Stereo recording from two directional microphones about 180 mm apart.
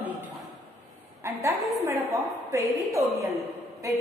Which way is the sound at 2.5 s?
15° right (ahead or behind).